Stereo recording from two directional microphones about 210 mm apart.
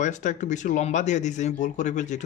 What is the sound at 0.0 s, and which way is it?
A man's voice, 35° left (ahead or behind).